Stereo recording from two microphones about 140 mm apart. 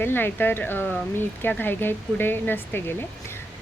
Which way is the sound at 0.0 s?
15° left (ahead or behind).